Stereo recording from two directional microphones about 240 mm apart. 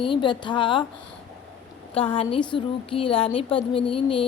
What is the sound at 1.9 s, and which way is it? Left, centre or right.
A woman's voice, left.